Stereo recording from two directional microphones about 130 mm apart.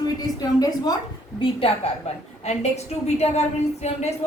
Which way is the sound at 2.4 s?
60° left (ahead or behind).